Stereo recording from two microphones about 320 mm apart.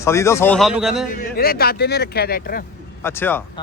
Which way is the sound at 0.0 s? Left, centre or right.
Centre.